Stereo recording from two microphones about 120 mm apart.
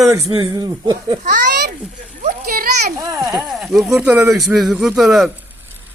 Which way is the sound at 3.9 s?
15° right (ahead or behind).